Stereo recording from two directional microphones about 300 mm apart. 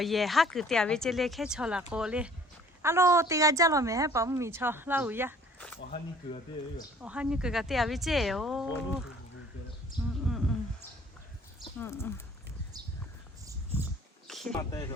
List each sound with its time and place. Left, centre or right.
0.0 s a woman's voice: centre
5.5 s speech: centre
5.9 s speech: centre
7.0 s speech: centre
10.2 s a sound: centre
11.6 s speech: centre
14.3 s a sound: centre